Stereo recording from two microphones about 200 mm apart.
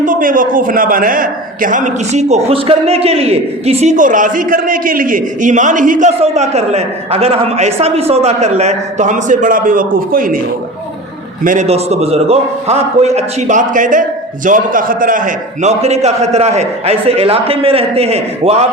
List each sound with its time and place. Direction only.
0.0 s a man's voice: 40° right (ahead or behind)
11.4 s a man's voice: 35° right (ahead or behind)